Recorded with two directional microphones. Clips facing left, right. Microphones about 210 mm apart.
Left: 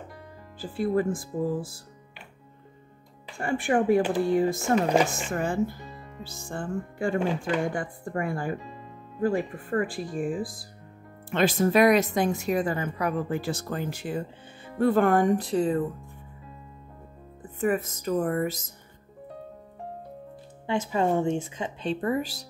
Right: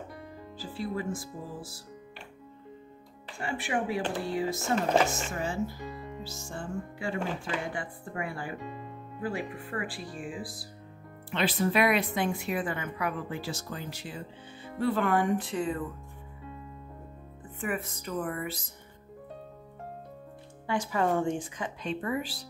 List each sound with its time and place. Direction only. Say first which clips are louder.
0.6 s speech: left 9 dB; 50° left (ahead or behind)
3.3 s speech: left 7 dB; 50° left (ahead or behind)
17.6 s speech: left 8 dB; 40° left (ahead or behind)
20.6 s a woman's voice: left 3 dB; 20° left (ahead or behind)
22.0 s speech: left 6 dB; 40° left (ahead or behind)